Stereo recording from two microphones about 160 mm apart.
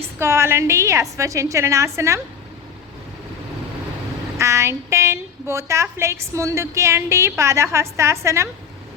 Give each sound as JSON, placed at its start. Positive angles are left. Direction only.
{"t": 0.0, "sound": "a woman's voice", "side_deg": -15}
{"t": 4.4, "sound": "a woman's voice", "side_deg": -15}